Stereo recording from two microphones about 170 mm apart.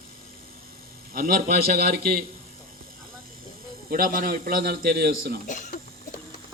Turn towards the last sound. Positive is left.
turn(degrees=50)  # may be behind; listen again after turning